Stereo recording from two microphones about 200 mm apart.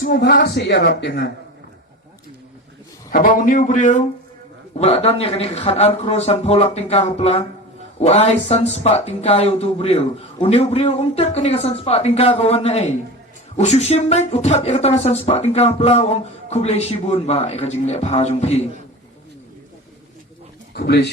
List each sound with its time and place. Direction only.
0.0 s a woman's voice: 55° left (ahead or behind)
3.1 s speech: 40° left (ahead or behind)
20.7 s a woman's voice: 55° left (ahead or behind)